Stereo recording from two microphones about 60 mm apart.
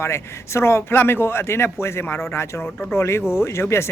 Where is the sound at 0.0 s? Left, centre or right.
Left.